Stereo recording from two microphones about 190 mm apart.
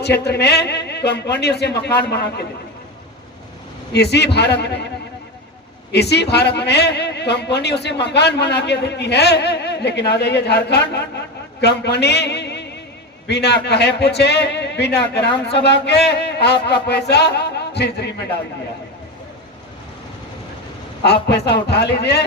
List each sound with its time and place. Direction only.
0.0 s a man's voice: 60° left (ahead or behind)
3.9 s a man's voice: 60° left (ahead or behind)
5.9 s a man's voice: 60° left (ahead or behind)
21.0 s a man's voice: 60° left (ahead or behind)